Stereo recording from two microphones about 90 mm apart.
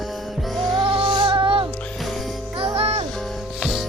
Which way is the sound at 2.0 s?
Centre (ahead or behind).